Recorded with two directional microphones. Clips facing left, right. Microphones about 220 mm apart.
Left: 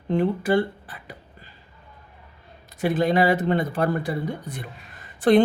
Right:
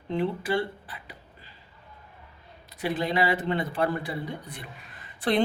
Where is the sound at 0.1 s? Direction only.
45° left (ahead or behind).